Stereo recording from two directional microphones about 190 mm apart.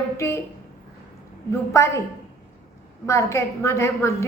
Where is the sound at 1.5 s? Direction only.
15° left (ahead or behind).